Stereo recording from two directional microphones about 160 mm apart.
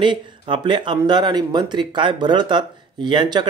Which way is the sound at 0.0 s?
30° right (ahead or behind).